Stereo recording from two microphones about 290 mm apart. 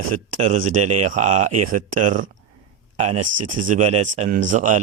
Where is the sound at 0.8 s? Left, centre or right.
Right.